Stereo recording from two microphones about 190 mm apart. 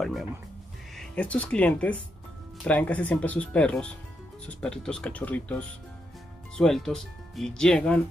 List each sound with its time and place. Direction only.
0.0 s speech: centre (ahead or behind)